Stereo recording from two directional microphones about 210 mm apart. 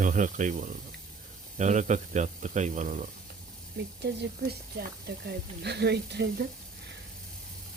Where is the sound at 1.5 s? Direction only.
35° right (ahead or behind).